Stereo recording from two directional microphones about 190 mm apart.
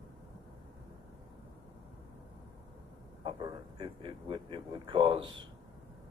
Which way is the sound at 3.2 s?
20° right (ahead or behind).